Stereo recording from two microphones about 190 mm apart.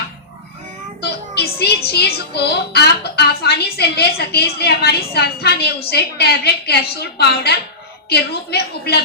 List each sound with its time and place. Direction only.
1.0 s a woman's voice: 55° left (ahead or behind)